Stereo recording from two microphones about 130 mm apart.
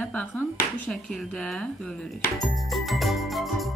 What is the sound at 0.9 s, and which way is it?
Speech, 5° left (ahead or behind).